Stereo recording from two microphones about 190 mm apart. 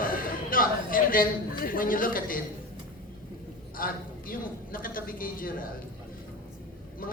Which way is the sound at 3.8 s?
50° left (ahead or behind).